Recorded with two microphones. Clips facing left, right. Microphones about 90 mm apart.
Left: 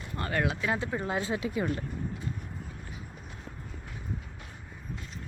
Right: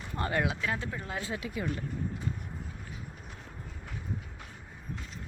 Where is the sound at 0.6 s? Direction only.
15° left (ahead or behind).